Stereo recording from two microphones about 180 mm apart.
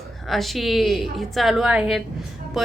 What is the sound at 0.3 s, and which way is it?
Speech, centre (ahead or behind).